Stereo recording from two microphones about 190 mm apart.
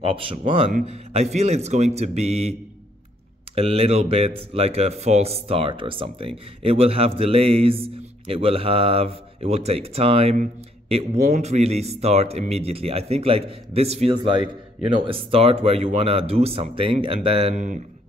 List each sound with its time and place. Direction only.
0.0 s a man's voice: 30° right (ahead or behind)
3.5 s speech: 30° right (ahead or behind)